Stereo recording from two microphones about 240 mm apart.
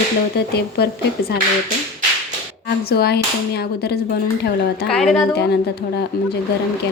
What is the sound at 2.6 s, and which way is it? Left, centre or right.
Speech, left.